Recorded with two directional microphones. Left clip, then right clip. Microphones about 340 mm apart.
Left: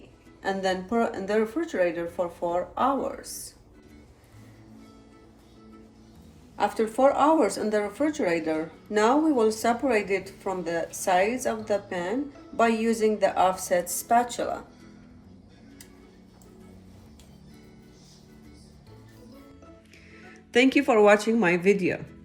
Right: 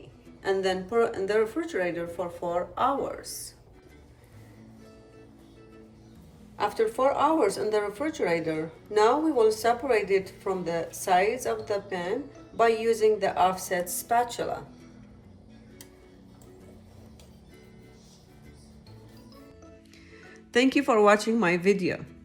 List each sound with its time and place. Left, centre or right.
0.4 s speech: centre
6.6 s speech: centre
20.5 s speech: centre